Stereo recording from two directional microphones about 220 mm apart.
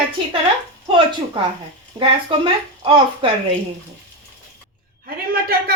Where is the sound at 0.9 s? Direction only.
20° right (ahead or behind).